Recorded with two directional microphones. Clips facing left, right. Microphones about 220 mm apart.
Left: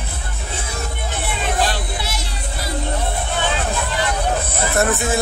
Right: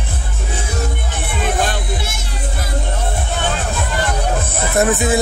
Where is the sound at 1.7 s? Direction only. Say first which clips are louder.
Right 2 dB; 50° right (ahead or behind).